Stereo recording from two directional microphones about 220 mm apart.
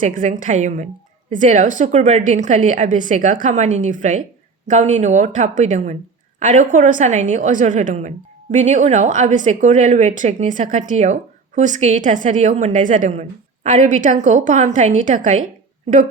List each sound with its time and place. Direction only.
0.0 s a woman's voice: 35° right (ahead or behind)